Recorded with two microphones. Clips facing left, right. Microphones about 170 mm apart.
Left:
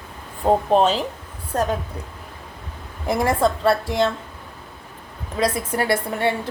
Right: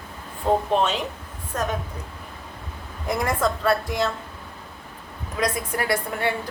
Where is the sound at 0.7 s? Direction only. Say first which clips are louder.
Left 5 dB; 35° left (ahead or behind).